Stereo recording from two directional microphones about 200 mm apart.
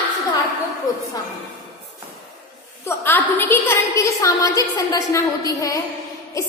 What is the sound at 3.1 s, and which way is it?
A woman's voice, 10° left (ahead or behind).